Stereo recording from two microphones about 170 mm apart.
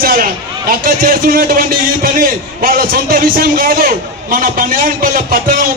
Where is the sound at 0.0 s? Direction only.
60° right (ahead or behind).